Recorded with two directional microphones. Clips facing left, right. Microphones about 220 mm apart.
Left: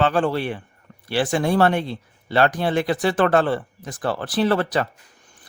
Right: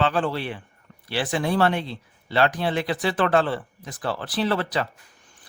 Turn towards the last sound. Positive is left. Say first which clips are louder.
# left 4 dB
turn(degrees=50)  # may be behind; listen again after turning